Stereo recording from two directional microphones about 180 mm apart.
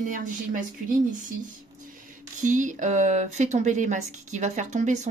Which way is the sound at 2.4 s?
45° right (ahead or behind).